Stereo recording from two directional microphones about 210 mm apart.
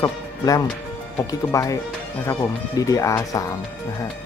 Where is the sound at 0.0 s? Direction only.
15° left (ahead or behind).